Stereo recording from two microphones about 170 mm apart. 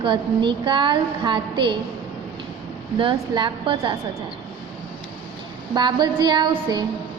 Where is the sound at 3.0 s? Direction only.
30° right (ahead or behind).